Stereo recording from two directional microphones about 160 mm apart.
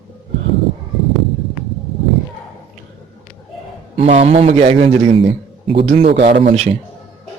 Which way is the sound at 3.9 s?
40° right (ahead or behind).